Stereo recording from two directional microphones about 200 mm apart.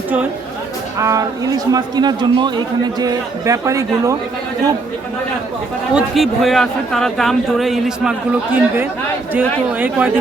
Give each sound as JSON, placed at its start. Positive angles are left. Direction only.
{"t": 0.9, "sound": "a man's voice", "side_deg": -15}
{"t": 5.9, "sound": "a man's voice", "side_deg": -5}